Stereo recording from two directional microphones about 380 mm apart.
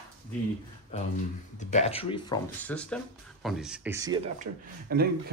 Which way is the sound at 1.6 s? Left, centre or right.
Centre.